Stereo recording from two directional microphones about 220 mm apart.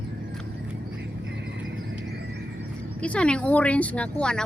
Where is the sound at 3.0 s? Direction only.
5° left (ahead or behind).